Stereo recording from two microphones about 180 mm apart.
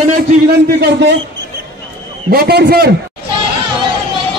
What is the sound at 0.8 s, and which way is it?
Speech, 70° right (ahead or behind).